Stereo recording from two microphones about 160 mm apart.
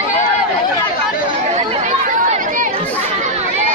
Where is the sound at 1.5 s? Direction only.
45° right (ahead or behind).